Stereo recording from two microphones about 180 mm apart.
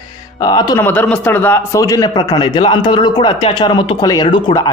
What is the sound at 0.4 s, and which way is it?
Speech, 25° left (ahead or behind).